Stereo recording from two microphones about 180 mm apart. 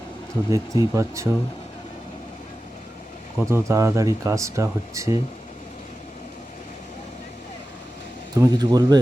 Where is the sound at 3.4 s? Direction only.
15° right (ahead or behind).